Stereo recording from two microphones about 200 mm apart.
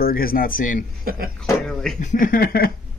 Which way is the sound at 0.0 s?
45° left (ahead or behind).